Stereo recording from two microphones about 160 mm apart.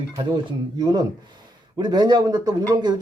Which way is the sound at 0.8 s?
25° right (ahead or behind).